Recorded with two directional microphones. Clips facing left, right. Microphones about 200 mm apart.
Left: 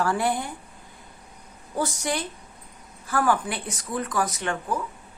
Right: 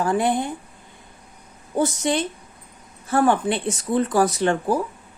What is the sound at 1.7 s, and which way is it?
A woman's voice, 25° right (ahead or behind).